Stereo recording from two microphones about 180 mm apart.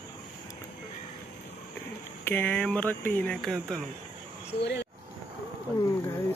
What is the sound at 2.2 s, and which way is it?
Speech, 10° left (ahead or behind).